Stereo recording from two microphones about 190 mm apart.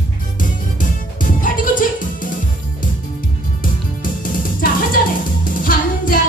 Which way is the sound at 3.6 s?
45° left (ahead or behind).